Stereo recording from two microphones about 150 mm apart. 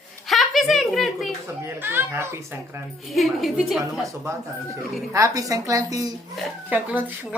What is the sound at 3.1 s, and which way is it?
Speech, centre (ahead or behind).